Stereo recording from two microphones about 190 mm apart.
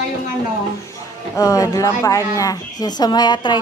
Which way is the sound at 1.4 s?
15° left (ahead or behind).